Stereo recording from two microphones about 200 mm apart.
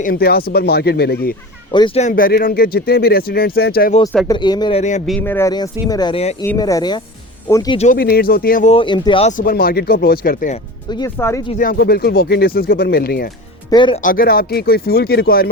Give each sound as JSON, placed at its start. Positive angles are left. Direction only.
{"t": 0.0, "sound": "speech", "side_deg": 50}
{"t": 1.7, "sound": "speech", "side_deg": 25}
{"t": 4.3, "sound": "speech", "side_deg": 20}
{"t": 4.8, "sound": "speech", "side_deg": 35}
{"t": 5.2, "sound": "speech", "side_deg": 10}
{"t": 6.4, "sound": "speech", "side_deg": 15}
{"t": 7.9, "sound": "speech", "side_deg": 50}
{"t": 8.7, "sound": "speech", "side_deg": 25}
{"t": 9.5, "sound": "speech", "side_deg": 50}
{"t": 10.8, "sound": "speech", "side_deg": 20}
{"t": 11.5, "sound": "speech", "side_deg": 45}
{"t": 13.7, "sound": "speech", "side_deg": 25}
{"t": 14.0, "sound": "speech", "side_deg": 45}